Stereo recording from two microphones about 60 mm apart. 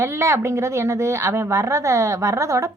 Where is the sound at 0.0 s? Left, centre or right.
Right.